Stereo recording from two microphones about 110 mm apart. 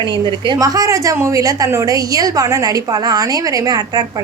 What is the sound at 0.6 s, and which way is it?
A woman's voice, 35° right (ahead or behind).